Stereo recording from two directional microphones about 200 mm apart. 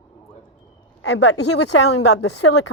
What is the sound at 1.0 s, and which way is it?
Speech, 90° left.